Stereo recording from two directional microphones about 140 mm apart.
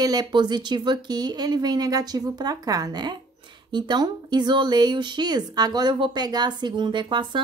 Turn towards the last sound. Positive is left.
turn(degrees=-35)  # may be behind; listen again after turning